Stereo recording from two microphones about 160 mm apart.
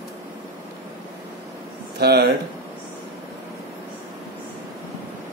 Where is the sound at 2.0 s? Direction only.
90° right.